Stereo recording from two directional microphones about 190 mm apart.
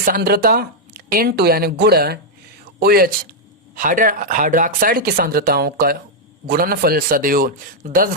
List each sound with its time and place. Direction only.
0.0 s speech: 50° right (ahead or behind)